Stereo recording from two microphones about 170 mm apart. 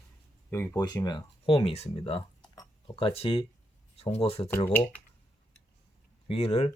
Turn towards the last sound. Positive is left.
turn(degrees=40)  # may be behind; listen again after turning